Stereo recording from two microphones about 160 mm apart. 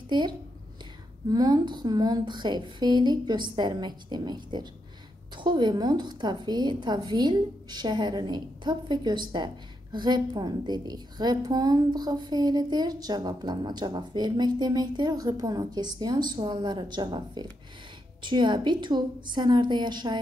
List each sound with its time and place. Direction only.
0.1 s a woman's voice: 30° right (ahead or behind)